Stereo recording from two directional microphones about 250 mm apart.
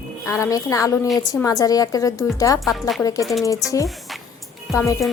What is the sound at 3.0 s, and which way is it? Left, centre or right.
Speech, centre.